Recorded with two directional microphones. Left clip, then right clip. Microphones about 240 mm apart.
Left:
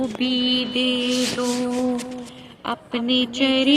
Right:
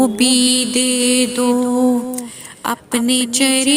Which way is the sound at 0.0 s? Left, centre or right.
Right.